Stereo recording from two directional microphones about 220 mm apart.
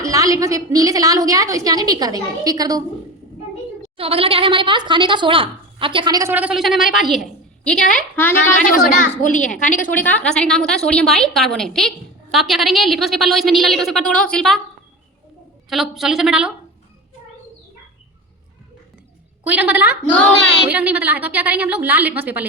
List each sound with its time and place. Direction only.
0.0 s a woman's voice: 15° right (ahead or behind)
3.9 s speech: 25° right (ahead or behind); by 8.4 s 10° left (ahead or behind)
8.6 s a woman's voice: 35° left (ahead or behind)
9.9 s a woman's voice: 5° left (ahead or behind)
15.7 s a woman's voice: centre (ahead or behind)
19.5 s a woman's voice: 5° right (ahead or behind)